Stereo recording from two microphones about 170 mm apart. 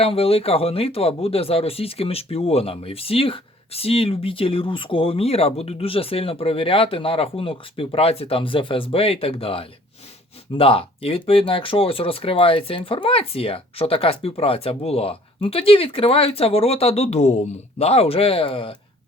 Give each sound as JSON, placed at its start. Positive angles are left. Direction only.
{"t": 0.0, "sound": "speech", "side_deg": 35}